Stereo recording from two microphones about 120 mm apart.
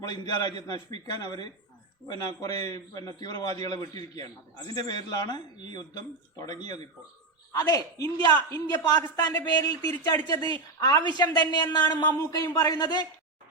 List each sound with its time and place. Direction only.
0.0 s a man's voice: 35° left (ahead or behind)